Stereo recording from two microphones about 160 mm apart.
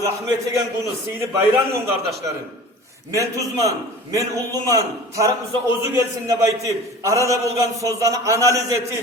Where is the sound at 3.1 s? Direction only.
20° right (ahead or behind).